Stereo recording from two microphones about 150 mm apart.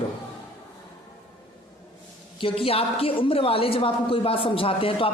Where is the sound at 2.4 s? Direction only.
40° left (ahead or behind).